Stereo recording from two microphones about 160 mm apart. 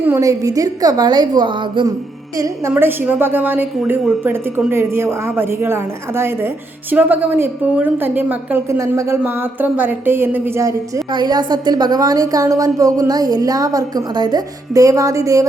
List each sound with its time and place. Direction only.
0.0 s a woman's voice: 20° right (ahead or behind)
2.4 s a woman's voice: 15° right (ahead or behind)